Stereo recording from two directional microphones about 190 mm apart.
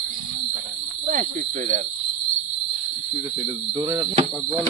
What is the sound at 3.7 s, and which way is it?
Speech, 20° right (ahead or behind).